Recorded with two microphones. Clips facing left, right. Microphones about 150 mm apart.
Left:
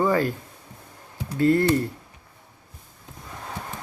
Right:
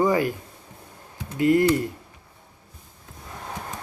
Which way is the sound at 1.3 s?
15° right (ahead or behind).